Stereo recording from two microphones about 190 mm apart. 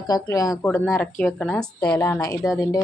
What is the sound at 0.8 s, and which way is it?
A woman's voice, centre (ahead or behind).